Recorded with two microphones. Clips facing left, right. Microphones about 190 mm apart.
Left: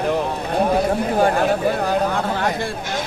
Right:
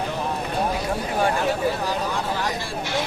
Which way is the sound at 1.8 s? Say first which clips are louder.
Left 6 dB; 55° left (ahead or behind).